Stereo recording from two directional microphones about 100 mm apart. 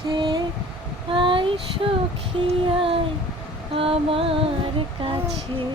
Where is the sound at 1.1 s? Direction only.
60° right (ahead or behind).